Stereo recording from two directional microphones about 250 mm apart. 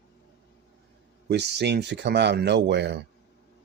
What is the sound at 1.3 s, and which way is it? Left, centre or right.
Speech, right.